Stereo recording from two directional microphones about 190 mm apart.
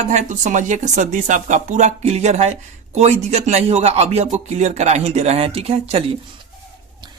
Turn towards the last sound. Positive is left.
turn(degrees=-30)  # may be behind; listen again after turning